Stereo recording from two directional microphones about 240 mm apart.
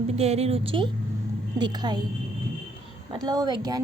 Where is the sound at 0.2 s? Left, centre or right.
Right.